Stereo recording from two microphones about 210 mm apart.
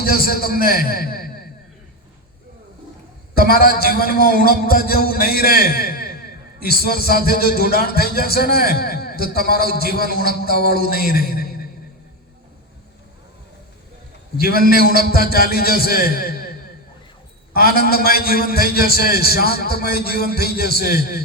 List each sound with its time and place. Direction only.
0.0 s a man's voice: 45° left (ahead or behind)
3.3 s a man's voice: 45° left (ahead or behind)
14.8 s a man's voice: 45° left (ahead or behind)
17.5 s a man's voice: 45° left (ahead or behind)